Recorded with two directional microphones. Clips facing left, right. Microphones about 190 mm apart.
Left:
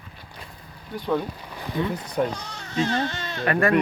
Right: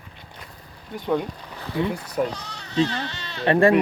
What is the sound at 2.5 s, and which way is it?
Baby cry, 45° left (ahead or behind).